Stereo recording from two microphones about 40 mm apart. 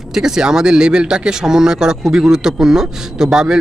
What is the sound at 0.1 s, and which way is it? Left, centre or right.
Speech, centre.